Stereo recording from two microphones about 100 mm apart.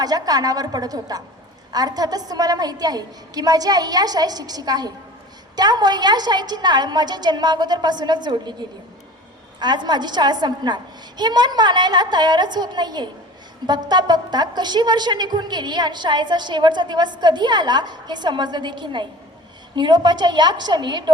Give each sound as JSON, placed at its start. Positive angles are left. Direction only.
{"t": 0.0, "sound": "a woman's voice", "side_deg": -40}
{"t": 9.6, "sound": "a woman's voice", "side_deg": -45}